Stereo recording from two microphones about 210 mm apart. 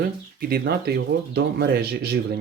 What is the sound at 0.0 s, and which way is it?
Speech, 45° right (ahead or behind).